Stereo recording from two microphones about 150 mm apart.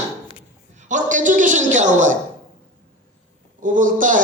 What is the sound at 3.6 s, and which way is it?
Speech, 60° right (ahead or behind).